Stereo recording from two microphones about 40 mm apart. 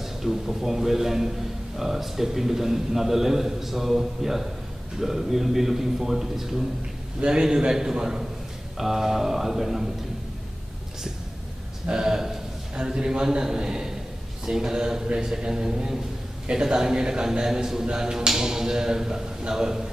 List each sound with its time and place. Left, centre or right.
0.0 s a man's voice: centre
7.2 s a man's voice: right
11.9 s a man's voice: centre
17.8 s speech: right
18.1 s a man's voice: centre